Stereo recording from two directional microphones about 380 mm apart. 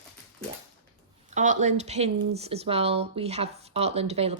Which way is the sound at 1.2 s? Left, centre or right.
Centre.